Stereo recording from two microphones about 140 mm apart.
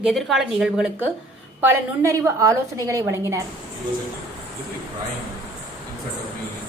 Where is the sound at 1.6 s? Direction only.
20° right (ahead or behind).